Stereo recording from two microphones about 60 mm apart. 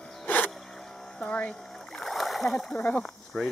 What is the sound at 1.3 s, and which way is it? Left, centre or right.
Speech, centre.